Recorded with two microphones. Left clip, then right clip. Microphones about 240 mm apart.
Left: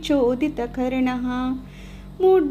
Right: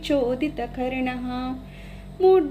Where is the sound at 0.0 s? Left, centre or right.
Left.